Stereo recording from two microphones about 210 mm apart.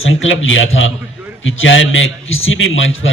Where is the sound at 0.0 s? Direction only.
65° left (ahead or behind).